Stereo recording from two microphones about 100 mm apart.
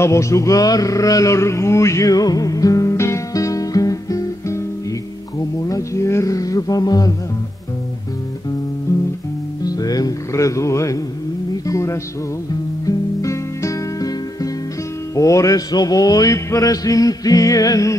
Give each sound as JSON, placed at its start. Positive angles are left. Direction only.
{"t": 0.0, "sound": "speech", "side_deg": 30}
{"t": 5.6, "sound": "music", "side_deg": 35}
{"t": 9.7, "sound": "music", "side_deg": 40}